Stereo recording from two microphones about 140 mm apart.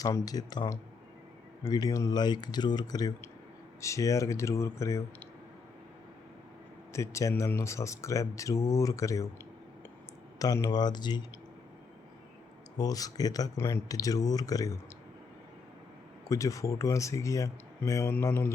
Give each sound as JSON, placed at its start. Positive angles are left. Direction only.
{"t": 0.0, "sound": "speech", "side_deg": 25}
{"t": 6.9, "sound": "speech", "side_deg": 20}
{"t": 10.3, "sound": "speech", "side_deg": 25}
{"t": 12.7, "sound": "speech", "side_deg": 25}
{"t": 16.3, "sound": "speech", "side_deg": 25}